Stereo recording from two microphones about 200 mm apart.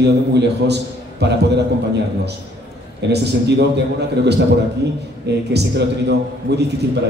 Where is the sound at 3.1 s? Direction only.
55° right (ahead or behind).